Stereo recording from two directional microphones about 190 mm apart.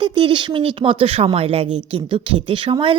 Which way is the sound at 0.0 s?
25° right (ahead or behind).